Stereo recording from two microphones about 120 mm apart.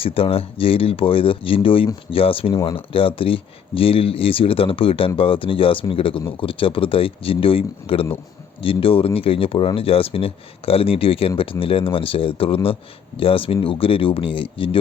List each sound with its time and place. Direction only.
0.0 s speech: 50° left (ahead or behind)